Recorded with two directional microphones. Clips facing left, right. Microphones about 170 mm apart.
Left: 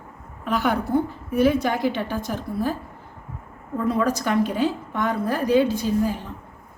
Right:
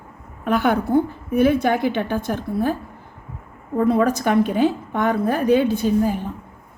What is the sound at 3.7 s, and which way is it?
A woman's voice, 55° right (ahead or behind).